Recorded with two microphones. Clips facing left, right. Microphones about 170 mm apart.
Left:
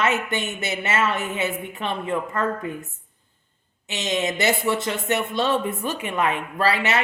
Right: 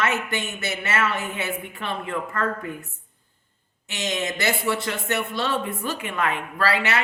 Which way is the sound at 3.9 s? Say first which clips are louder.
Left 3 dB; 20° left (ahead or behind).